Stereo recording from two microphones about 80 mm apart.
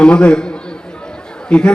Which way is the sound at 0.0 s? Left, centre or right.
Centre.